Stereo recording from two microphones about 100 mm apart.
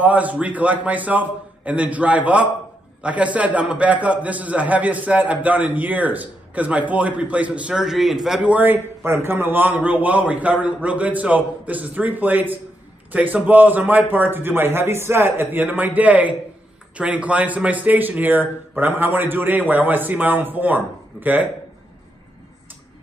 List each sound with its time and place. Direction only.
0.0 s a man's voice: 15° right (ahead or behind)
8.4 s a man's voice: 15° right (ahead or behind)